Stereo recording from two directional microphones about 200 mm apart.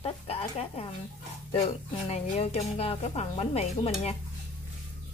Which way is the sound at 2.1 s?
30° left (ahead or behind).